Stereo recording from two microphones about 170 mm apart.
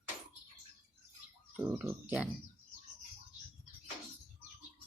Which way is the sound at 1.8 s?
5° right (ahead or behind).